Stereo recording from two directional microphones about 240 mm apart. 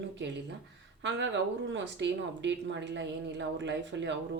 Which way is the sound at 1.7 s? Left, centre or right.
Right.